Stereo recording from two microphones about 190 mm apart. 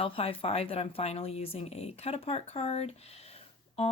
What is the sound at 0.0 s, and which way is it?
Speech, 30° left (ahead or behind).